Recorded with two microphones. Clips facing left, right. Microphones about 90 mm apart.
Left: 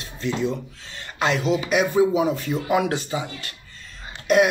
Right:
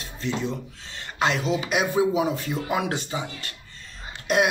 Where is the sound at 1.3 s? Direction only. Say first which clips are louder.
Left 3 dB; 45° left (ahead or behind).